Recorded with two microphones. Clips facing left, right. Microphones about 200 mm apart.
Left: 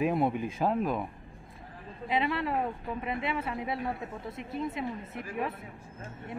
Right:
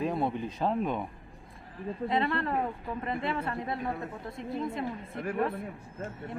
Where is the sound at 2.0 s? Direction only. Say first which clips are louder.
Even; 5° left (ahead or behind).